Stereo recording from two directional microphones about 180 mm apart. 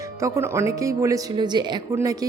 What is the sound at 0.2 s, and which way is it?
Speech, 15° right (ahead or behind).